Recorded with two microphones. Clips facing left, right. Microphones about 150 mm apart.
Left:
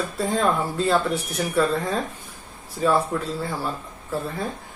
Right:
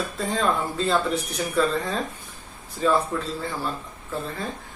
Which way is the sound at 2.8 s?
Centre (ahead or behind).